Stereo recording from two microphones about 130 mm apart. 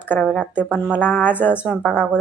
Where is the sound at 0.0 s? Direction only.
15° left (ahead or behind).